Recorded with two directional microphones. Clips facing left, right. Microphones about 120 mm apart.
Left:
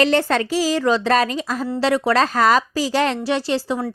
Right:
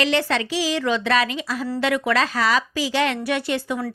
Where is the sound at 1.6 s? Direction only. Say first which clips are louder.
Left 3 dB; 30° left (ahead or behind).